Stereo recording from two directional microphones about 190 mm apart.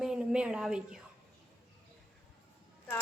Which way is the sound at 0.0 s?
5° right (ahead or behind).